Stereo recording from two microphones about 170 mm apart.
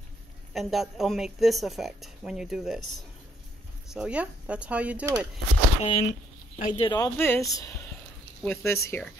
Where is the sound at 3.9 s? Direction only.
5° right (ahead or behind).